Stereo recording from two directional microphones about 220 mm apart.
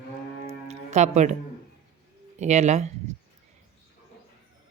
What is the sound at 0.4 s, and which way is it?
Music, 30° right (ahead or behind).